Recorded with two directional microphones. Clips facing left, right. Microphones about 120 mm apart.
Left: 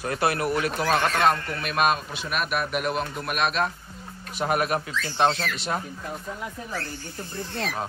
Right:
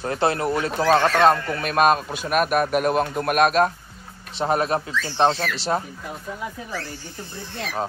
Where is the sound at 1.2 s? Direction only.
40° right (ahead or behind).